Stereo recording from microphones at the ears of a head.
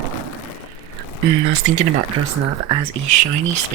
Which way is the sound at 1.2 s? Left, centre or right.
Right.